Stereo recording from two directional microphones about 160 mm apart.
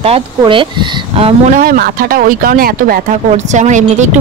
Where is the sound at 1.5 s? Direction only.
65° right (ahead or behind).